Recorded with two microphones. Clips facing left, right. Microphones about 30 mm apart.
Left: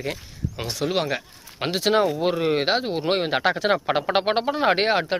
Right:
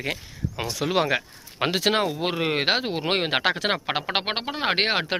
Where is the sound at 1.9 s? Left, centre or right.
Right.